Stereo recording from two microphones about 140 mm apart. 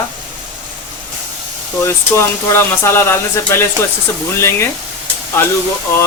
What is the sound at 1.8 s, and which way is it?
Speech, 20° left (ahead or behind).